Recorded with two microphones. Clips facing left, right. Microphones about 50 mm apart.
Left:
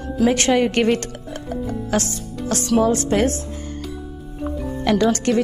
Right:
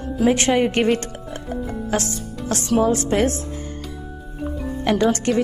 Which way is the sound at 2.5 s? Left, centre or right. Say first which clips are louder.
Left 1 dB; right.